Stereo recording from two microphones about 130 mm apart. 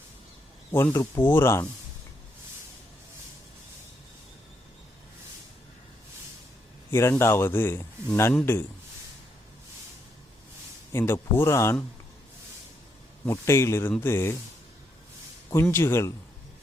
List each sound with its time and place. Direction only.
0.7 s speech: 20° left (ahead or behind)
6.9 s speech: 20° left (ahead or behind)
10.9 s speech: 20° left (ahead or behind)
13.2 s speech: 20° left (ahead or behind)
15.7 s speech: 20° left (ahead or behind)